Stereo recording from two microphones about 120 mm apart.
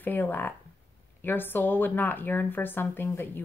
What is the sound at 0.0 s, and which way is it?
Speech, 15° left (ahead or behind).